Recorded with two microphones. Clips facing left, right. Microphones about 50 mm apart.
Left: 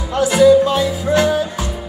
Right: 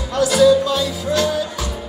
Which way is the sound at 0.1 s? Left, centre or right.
Left.